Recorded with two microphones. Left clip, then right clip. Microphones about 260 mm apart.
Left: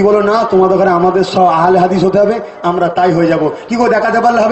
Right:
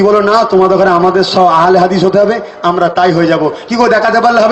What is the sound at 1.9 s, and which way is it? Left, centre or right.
A man's voice, centre.